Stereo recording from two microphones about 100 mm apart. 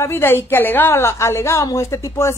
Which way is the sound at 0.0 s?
25° left (ahead or behind).